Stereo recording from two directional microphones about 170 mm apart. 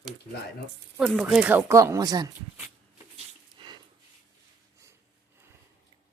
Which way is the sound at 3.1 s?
25° right (ahead or behind).